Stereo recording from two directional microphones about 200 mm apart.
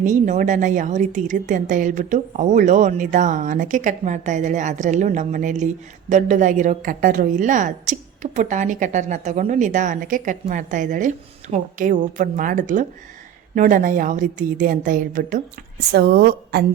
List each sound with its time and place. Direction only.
0.0 s a woman's voice: 40° right (ahead or behind)
15.9 s a woman's voice: 50° right (ahead or behind)